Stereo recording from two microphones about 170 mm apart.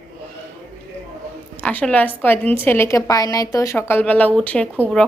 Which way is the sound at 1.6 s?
5° left (ahead or behind).